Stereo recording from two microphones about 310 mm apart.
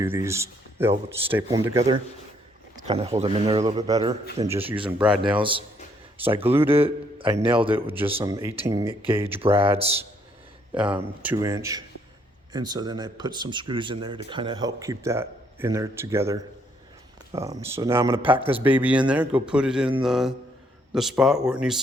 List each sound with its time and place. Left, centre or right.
0.0 s speech: centre
2.7 s a man's voice: centre